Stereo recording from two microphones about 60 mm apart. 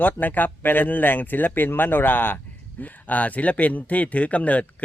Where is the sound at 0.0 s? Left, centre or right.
Left.